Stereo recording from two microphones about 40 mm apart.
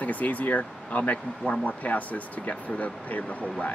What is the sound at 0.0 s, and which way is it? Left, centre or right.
Speech, left.